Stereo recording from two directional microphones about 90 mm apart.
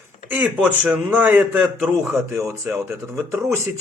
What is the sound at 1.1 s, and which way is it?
A man's voice, 20° right (ahead or behind).